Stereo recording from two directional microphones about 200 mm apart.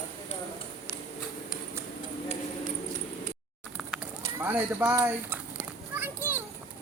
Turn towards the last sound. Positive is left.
turn(degrees=-10)  # may be behind; listen again after turning